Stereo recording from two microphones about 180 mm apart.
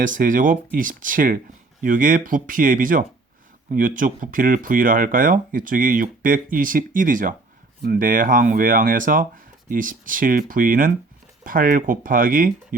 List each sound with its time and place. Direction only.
0.0 s speech: 45° right (ahead or behind)